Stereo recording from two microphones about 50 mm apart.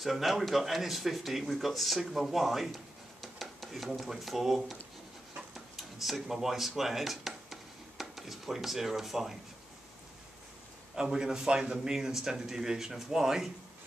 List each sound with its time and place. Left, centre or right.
0.0 s speech: centre
5.8 s speech: centre
11.0 s a man's voice: centre